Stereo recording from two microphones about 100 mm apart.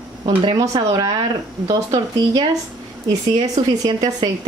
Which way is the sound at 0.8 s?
50° right (ahead or behind).